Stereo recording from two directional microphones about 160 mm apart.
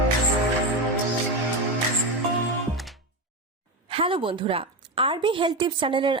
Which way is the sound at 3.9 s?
35° right (ahead or behind).